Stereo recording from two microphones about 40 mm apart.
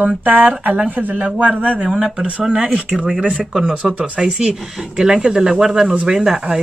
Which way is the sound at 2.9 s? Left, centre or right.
Centre.